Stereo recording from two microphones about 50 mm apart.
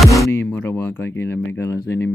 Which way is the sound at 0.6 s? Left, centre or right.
Left.